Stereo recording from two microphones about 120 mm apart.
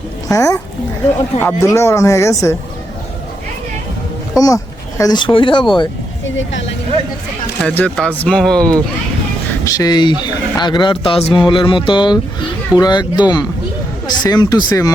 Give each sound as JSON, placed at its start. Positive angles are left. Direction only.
{"t": 0.3, "sound": "speech", "side_deg": 25}
{"t": 4.4, "sound": "speech", "side_deg": 30}
{"t": 7.6, "sound": "speech", "side_deg": 10}
{"t": 9.6, "sound": "speech", "side_deg": 30}